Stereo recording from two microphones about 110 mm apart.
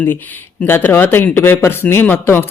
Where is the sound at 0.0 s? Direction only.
20° left (ahead or behind).